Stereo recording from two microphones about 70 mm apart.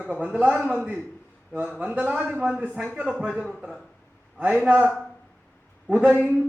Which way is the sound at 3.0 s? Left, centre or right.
Centre.